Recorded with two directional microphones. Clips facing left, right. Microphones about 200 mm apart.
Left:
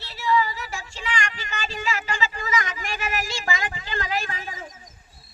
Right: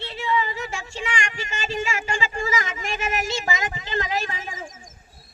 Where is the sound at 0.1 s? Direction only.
25° right (ahead or behind).